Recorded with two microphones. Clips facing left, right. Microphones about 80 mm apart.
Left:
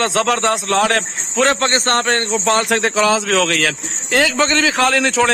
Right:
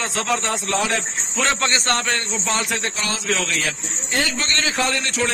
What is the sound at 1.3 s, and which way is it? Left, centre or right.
Speech, left.